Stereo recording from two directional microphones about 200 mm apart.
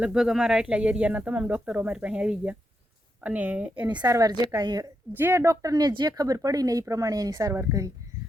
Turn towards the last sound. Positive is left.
turn(degrees=-15)  # may be behind; listen again after turning